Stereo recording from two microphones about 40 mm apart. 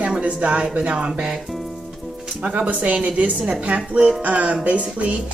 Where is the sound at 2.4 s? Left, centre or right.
Right.